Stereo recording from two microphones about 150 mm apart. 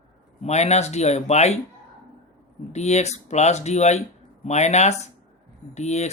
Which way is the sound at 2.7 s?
50° left (ahead or behind).